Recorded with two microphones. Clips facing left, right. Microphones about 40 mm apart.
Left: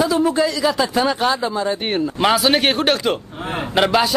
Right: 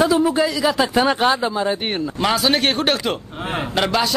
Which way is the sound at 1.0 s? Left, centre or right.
Right.